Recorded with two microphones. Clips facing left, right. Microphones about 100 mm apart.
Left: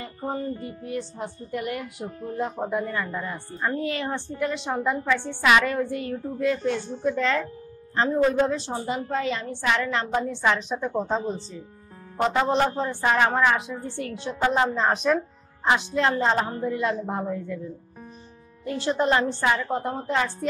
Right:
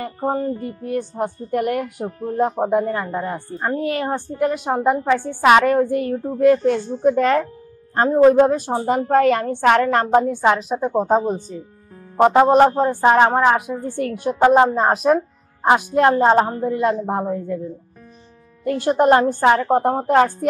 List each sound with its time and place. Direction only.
0.0 s a woman's voice: 60° right (ahead or behind)
13.0 s a woman's voice: 40° right (ahead or behind)
18.6 s a woman's voice: 50° right (ahead or behind)